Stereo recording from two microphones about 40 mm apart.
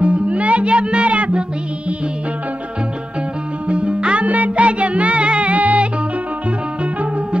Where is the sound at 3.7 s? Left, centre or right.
Right.